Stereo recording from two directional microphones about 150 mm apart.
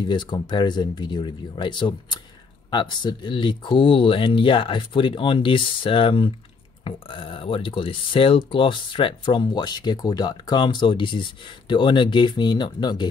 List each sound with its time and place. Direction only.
0.0 s speech: 30° left (ahead or behind)